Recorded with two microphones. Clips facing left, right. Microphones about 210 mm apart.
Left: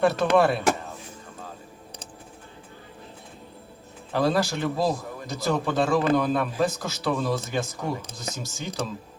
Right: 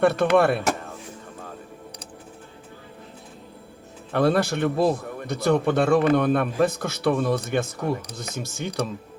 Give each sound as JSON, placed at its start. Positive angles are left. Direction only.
{"t": 0.0, "sound": "a man's voice", "side_deg": -60}
{"t": 4.1, "sound": "a man's voice", "side_deg": -60}